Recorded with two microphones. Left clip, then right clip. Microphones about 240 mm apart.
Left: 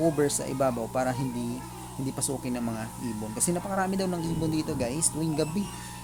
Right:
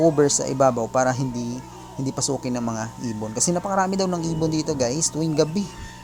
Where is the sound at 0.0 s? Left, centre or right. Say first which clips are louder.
Right 8 dB; right.